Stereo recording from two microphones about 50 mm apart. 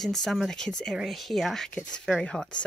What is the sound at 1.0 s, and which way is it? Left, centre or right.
Speech, centre.